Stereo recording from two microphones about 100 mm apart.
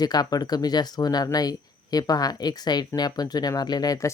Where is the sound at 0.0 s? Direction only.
40° left (ahead or behind).